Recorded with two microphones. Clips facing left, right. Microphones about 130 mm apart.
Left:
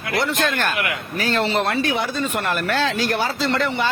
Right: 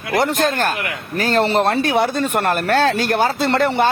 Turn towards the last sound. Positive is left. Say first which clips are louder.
# right 5 dB
turn(degrees=-55)  # may be behind; listen again after turning